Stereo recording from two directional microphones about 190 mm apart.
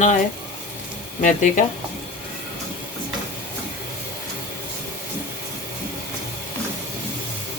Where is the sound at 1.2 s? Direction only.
45° left (ahead or behind).